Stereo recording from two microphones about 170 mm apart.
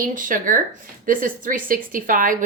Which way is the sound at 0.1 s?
50° right (ahead or behind).